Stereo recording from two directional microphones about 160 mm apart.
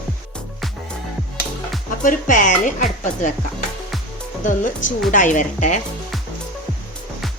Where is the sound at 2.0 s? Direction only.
55° left (ahead or behind).